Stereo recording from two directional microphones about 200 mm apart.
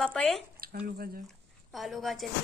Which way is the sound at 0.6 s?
50° right (ahead or behind).